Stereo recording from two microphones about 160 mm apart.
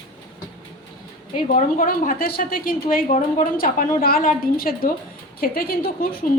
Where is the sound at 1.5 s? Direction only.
55° left (ahead or behind).